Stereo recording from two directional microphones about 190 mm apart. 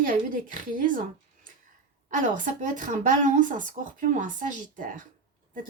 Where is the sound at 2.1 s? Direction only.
40° right (ahead or behind).